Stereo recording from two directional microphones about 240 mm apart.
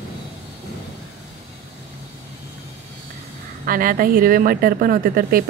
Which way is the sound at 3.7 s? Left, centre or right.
Right.